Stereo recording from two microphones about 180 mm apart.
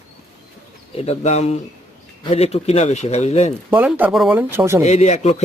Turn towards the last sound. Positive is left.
turn(degrees=35)  # may be behind; listen again after turning